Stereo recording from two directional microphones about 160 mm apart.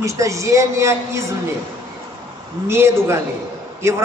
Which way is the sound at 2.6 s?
15° right (ahead or behind).